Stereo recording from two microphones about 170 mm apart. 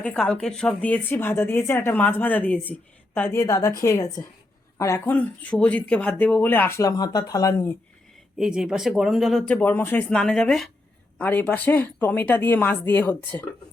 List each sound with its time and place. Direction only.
0.0 s speech: 5° left (ahead or behind)
8.4 s speech: 5° right (ahead or behind)